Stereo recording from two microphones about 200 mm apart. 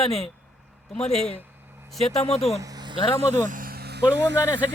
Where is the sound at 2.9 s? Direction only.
25° left (ahead or behind).